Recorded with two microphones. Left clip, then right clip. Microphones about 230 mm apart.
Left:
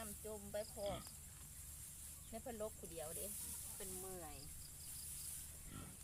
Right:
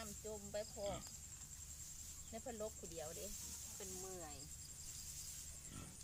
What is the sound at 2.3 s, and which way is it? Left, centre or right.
Speech, centre.